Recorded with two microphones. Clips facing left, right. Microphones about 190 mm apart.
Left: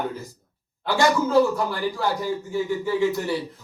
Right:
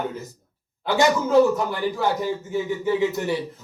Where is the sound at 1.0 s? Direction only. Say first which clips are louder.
Right 2 dB; 20° right (ahead or behind).